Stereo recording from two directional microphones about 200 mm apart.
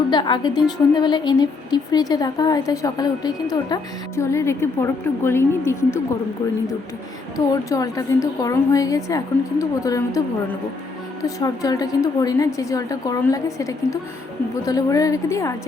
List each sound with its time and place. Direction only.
0.1 s a woman's voice: 20° left (ahead or behind)
7.3 s a woman's voice: 15° left (ahead or behind)